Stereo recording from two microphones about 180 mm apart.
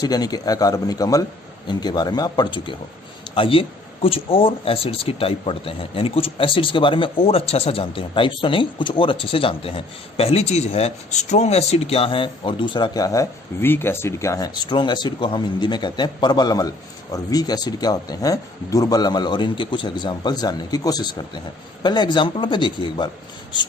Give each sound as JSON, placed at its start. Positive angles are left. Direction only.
{"t": 0.0, "sound": "speech", "side_deg": 20}